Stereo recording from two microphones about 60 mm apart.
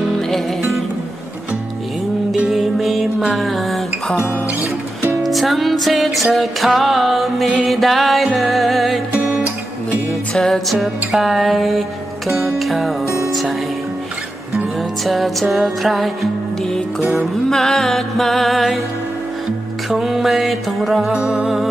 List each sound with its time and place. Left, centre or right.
2.5 s music: centre
3.3 s a sound: centre
5.2 s music: centre
10.3 s music: centre
15.0 s music: centre
17.5 s music: centre
19.9 s music: centre
21.1 s music: centre